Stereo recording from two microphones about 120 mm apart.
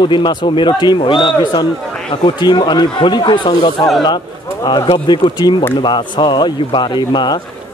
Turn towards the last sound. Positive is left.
turn(degrees=40)  # may be behind; listen again after turning